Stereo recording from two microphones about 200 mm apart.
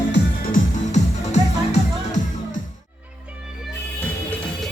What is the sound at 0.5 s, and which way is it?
Music, 35° left (ahead or behind).